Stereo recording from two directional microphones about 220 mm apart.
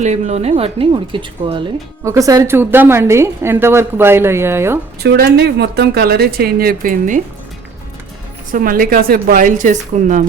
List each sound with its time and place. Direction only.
0.0 s a woman's voice: 30° right (ahead or behind); by 4.8 s 10° right (ahead or behind)
5.0 s speech: 45° right (ahead or behind)
8.5 s a woman's voice: 40° right (ahead or behind)